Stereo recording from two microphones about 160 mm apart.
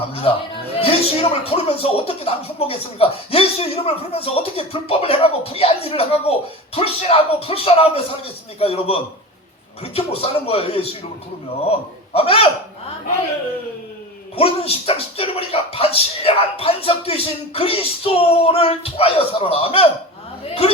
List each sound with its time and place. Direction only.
0.1 s a woman's voice: 35° left (ahead or behind)
14.3 s a woman's voice: 35° left (ahead or behind)